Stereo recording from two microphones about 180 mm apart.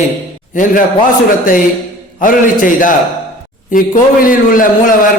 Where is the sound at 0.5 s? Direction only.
50° left (ahead or behind).